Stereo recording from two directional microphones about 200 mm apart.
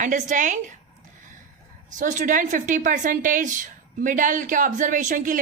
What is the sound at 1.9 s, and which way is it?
A woman's voice, 40° right (ahead or behind).